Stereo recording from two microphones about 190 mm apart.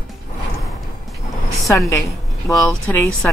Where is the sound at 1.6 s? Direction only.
Centre (ahead or behind).